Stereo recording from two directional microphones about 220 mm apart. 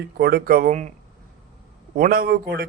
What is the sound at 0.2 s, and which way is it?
Speech, 45° right (ahead or behind).